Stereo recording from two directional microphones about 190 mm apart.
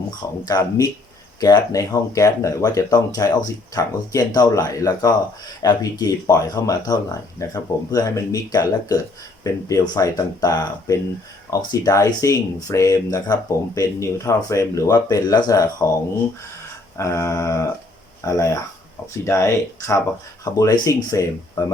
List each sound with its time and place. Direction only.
0.4 s speech: 20° left (ahead or behind)
17.0 s speech: 15° left (ahead or behind)